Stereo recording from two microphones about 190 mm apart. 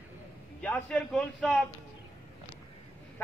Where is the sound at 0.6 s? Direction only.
5° left (ahead or behind).